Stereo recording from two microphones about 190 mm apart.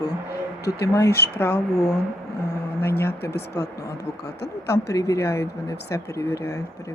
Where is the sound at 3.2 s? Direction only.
55° left (ahead or behind).